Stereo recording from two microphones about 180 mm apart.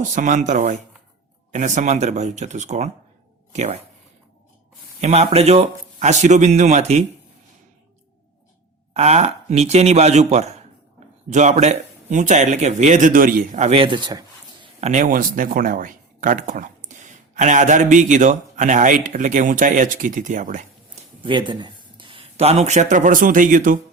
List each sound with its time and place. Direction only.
0.2 s speech: 45° right (ahead or behind)
4.9 s speech: 35° right (ahead or behind)
8.9 s speech: 35° right (ahead or behind)
14.8 s speech: 40° right (ahead or behind)
21.2 s speech: 25° right (ahead or behind); by 23.8 s 45° right (ahead or behind)